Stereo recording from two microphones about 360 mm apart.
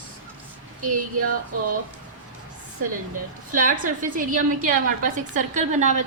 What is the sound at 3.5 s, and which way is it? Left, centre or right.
A woman's voice, right.